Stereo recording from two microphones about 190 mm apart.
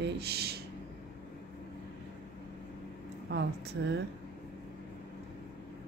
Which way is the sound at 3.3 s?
60° right (ahead or behind).